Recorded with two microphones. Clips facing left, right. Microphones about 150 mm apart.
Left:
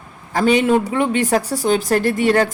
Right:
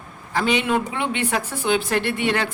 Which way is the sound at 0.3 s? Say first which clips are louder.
Left 6 dB; 40° left (ahead or behind).